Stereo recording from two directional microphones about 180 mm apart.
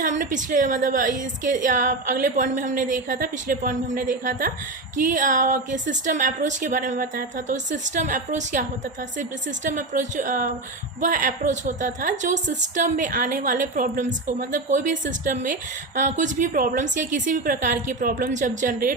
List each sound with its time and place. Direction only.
0.0 s a woman's voice: 45° right (ahead or behind)